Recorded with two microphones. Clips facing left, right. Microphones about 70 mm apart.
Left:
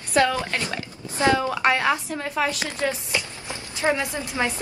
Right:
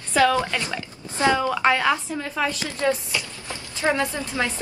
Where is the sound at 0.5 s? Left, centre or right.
Left.